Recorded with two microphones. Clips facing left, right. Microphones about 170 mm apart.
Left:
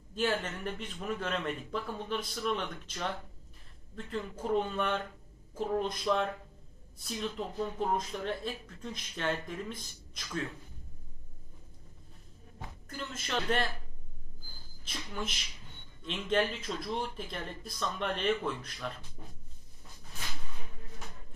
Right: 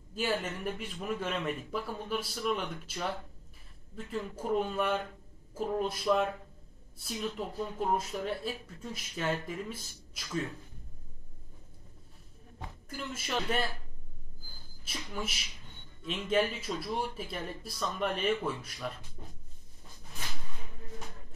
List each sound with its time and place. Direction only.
0.1 s speech: 10° right (ahead or behind)
12.8 s speech: 5° right (ahead or behind)
14.9 s speech: 5° right (ahead or behind)